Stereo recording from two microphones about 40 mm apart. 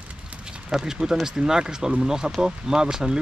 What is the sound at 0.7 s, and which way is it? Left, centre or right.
Speech, centre.